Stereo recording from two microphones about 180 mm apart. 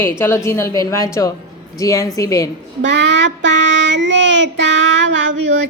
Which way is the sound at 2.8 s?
80° right.